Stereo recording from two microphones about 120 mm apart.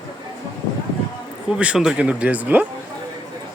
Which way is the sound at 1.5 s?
10° right (ahead or behind).